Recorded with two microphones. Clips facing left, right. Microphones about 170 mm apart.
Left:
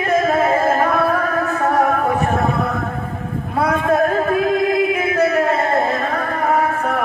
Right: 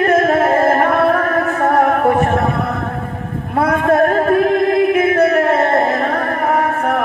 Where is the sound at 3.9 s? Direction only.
60° right (ahead or behind).